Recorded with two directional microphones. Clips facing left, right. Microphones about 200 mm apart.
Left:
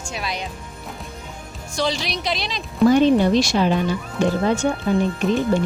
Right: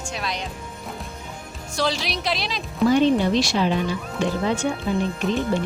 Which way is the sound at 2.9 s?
50° left (ahead or behind).